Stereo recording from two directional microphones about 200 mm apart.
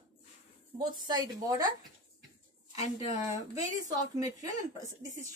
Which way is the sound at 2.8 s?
35° left (ahead or behind).